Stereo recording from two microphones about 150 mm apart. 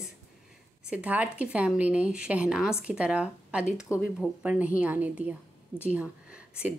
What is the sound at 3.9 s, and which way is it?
Speech, 20° left (ahead or behind).